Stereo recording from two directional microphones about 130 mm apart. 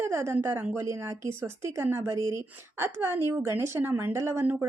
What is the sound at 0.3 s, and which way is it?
A woman's voice, 15° right (ahead or behind).